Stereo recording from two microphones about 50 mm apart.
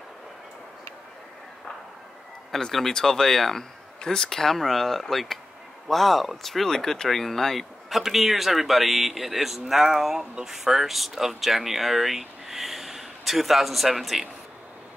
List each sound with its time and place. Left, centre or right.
2.5 s speech: centre